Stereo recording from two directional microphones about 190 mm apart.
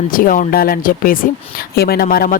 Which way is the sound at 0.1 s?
45° left (ahead or behind).